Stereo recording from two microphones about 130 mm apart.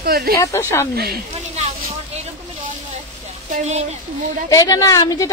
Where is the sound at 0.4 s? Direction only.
20° left (ahead or behind).